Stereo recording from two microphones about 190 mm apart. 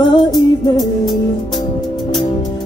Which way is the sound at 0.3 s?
Centre (ahead or behind).